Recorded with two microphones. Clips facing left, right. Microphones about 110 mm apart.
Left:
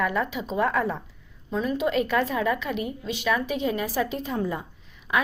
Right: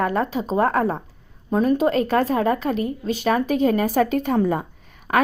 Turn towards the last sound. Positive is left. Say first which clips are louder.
# right 5 dB
turn(degrees=-55)  # may be behind; listen again after turning